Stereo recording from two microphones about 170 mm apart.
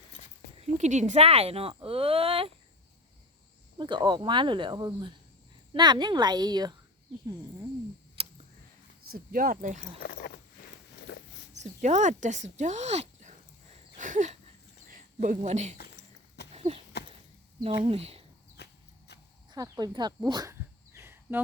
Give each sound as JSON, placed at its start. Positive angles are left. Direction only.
{"t": 0.6, "sound": "speech", "side_deg": -45}
{"t": 3.8, "sound": "speech", "side_deg": -25}
{"t": 9.0, "sound": "speech", "side_deg": -55}
{"t": 10.0, "sound": "a sound", "side_deg": 75}
{"t": 11.1, "sound": "dog", "side_deg": 75}
{"t": 11.6, "sound": "a sound", "side_deg": -45}
{"t": 17.8, "sound": "speech", "side_deg": -35}
{"t": 18.5, "sound": "walk", "side_deg": 80}
{"t": 19.5, "sound": "a sound", "side_deg": -20}